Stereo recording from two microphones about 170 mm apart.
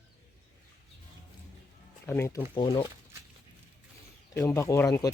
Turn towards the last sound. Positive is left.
turn(degrees=20)  # may be behind; listen again after turning